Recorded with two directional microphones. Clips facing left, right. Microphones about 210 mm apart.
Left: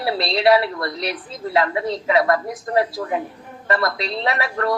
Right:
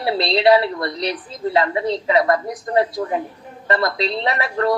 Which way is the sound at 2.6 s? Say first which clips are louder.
Right 2 dB; 25° right (ahead or behind).